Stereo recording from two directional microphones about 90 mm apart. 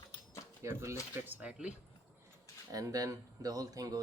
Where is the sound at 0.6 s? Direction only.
30° right (ahead or behind); by 1.7 s 15° right (ahead or behind).